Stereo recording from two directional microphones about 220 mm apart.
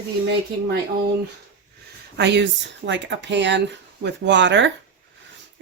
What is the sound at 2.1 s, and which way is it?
Speech, 50° right (ahead or behind).